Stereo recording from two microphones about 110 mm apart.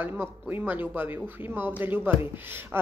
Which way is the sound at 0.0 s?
20° right (ahead or behind).